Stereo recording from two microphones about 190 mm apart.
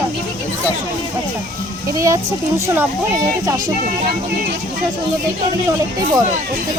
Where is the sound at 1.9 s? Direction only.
15° right (ahead or behind).